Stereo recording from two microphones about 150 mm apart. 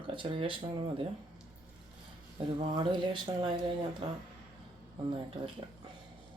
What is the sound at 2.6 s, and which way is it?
Speech, 30° right (ahead or behind).